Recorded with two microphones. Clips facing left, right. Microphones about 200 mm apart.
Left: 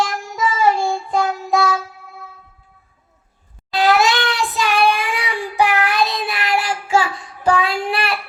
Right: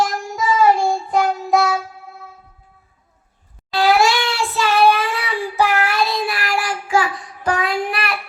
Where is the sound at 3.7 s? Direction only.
20° left (ahead or behind).